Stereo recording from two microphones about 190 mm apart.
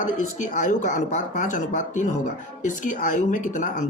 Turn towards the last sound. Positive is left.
turn(degrees=45)  # may be behind; listen again after turning